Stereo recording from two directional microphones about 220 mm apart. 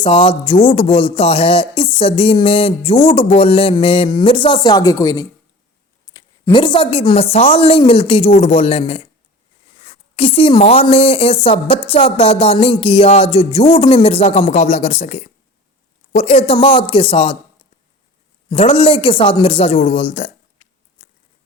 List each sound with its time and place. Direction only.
0.0 s a woman's voice: 25° left (ahead or behind)
18.4 s speech: 25° left (ahead or behind)